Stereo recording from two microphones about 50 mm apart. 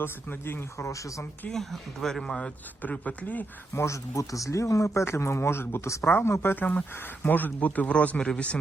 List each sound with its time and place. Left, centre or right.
0.0 s speech: left
1.5 s speech: centre
2.9 s speech: left
3.8 s speech: left
5.0 s a man's voice: left